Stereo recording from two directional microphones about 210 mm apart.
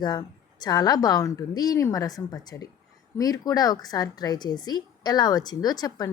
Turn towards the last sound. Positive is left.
turn(degrees=20)  # may be behind; listen again after turning